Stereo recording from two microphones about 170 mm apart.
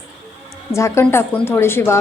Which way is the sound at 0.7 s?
15° left (ahead or behind).